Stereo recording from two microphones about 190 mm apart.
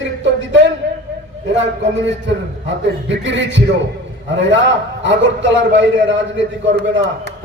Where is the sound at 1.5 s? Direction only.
70° right (ahead or behind).